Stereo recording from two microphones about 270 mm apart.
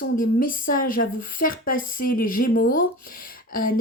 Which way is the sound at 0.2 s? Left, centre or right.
Left.